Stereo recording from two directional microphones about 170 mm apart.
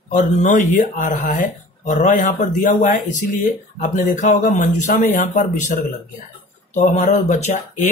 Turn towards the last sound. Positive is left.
turn(degrees=45)  # may be behind; listen again after turning